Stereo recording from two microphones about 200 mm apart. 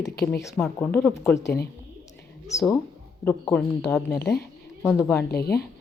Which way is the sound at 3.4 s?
Centre (ahead or behind).